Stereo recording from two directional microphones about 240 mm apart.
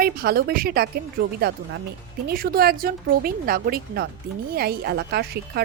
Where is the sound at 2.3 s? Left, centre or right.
Right.